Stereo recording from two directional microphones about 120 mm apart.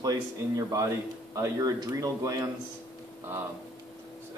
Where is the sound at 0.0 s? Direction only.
30° right (ahead or behind).